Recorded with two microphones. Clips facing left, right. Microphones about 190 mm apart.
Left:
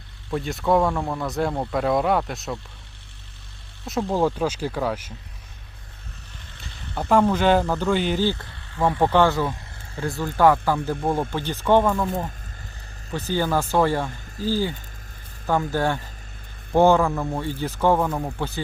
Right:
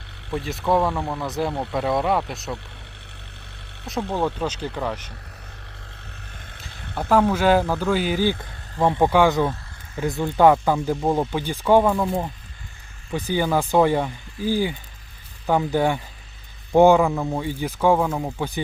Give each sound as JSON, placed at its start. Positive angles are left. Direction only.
{"t": 0.3, "sound": "speech", "side_deg": 0}
{"t": 3.8, "sound": "speech", "side_deg": 5}
{"t": 7.1, "sound": "speech", "side_deg": -5}
{"t": 8.8, "sound": "speech", "side_deg": -20}